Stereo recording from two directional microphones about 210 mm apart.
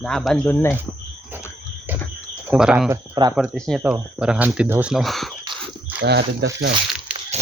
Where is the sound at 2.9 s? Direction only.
20° right (ahead or behind).